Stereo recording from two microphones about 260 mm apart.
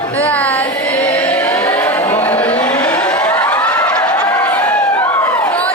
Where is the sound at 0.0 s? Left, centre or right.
Centre.